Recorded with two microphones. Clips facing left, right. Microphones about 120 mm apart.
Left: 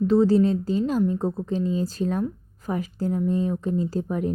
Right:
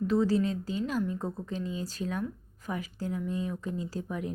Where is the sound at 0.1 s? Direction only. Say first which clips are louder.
Left 8 dB; 30° left (ahead or behind).